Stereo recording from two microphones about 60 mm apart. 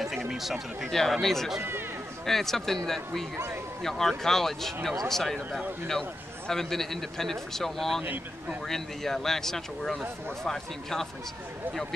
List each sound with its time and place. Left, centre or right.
0.3 s speech: centre
0.8 s a man's voice: centre
1.6 s speech: right
2.2 s a man's voice: centre
8.0 s speech: right
8.6 s a man's voice: centre